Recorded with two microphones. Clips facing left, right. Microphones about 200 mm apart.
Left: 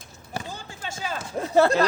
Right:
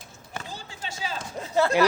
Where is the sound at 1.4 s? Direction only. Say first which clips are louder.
Left 5 dB; 60° left (ahead or behind).